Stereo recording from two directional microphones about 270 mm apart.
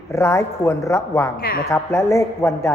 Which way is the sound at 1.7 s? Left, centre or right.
Centre.